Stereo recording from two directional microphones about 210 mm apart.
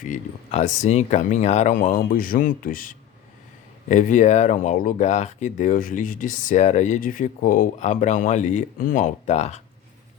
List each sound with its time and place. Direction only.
0.0 s speech: 35° left (ahead or behind)